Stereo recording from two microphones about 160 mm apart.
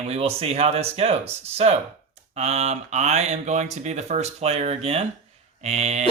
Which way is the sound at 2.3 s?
45° right (ahead or behind).